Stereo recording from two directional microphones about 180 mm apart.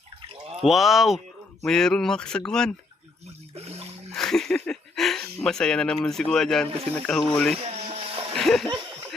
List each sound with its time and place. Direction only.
0.6 s speech: centre (ahead or behind)
3.5 s water: 35° right (ahead or behind)
4.1 s a sound: 5° left (ahead or behind)
5.4 s speech: 5° left (ahead or behind)
7.6 s a sound: 35° right (ahead or behind)
8.4 s speech: centre (ahead or behind)